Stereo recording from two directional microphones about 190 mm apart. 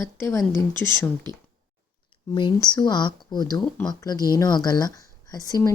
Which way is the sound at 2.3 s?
25° left (ahead or behind).